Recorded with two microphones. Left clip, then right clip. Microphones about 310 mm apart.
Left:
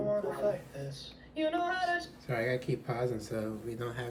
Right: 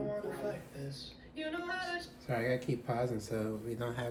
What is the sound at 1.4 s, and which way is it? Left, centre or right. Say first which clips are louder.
Female singing: left 7 dB; left.